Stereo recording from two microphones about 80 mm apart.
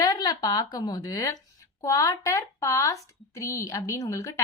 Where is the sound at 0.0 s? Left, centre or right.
Left.